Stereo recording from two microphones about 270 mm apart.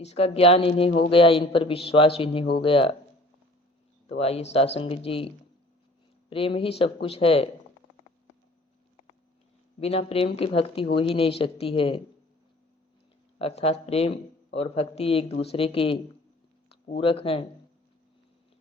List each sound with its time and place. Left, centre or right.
0.0 s a man's voice: left
4.0 s a man's voice: left
6.3 s a man's voice: centre
9.8 s a man's voice: left
13.4 s a man's voice: left
17.0 s a man's voice: left